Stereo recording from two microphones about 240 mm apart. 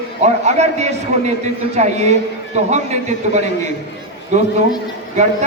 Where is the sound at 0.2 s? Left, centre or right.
Right.